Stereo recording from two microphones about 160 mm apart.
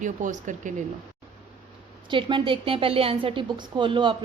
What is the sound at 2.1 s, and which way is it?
A woman's voice, 30° right (ahead or behind).